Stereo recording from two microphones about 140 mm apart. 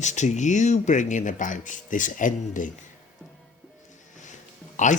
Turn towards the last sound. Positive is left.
turn(degrees=60)  # may be behind; listen again after turning